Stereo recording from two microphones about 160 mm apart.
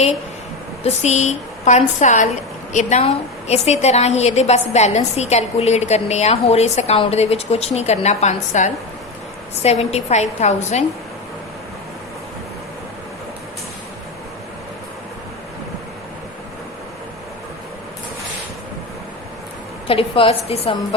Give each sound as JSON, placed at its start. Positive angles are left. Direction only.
{"t": 0.8, "sound": "a woman's voice", "side_deg": 45}
{"t": 19.9, "sound": "a woman's voice", "side_deg": 35}